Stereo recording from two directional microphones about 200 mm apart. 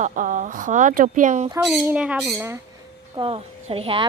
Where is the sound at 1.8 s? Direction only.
5° right (ahead or behind).